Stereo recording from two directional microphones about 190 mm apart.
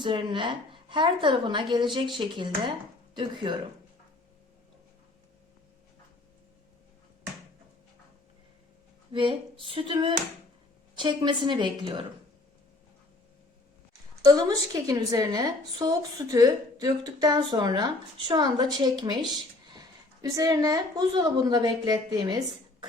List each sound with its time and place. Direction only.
0.0 s a woman's voice: 25° right (ahead or behind)
9.1 s a woman's voice: 30° right (ahead or behind)
14.3 s a woman's voice: 20° right (ahead or behind)
20.2 s a woman's voice: 20° right (ahead or behind)